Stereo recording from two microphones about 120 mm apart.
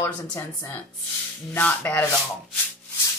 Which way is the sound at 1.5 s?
15° left (ahead or behind).